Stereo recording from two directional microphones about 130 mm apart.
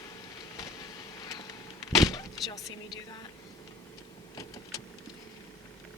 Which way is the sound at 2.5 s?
35° left (ahead or behind).